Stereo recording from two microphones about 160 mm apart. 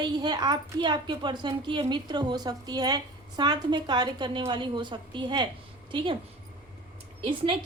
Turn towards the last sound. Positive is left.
turn(degrees=-35)  # may be behind; listen again after turning